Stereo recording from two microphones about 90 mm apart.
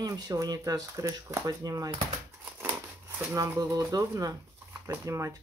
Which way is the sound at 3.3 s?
40° right (ahead or behind).